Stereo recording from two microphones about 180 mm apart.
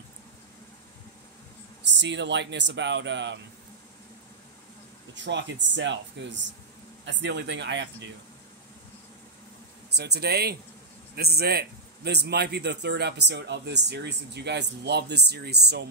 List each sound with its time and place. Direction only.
2.0 s speech: 75° right (ahead or behind)
5.1 s speech: 80° right
9.9 s a man's voice: 65° right (ahead or behind)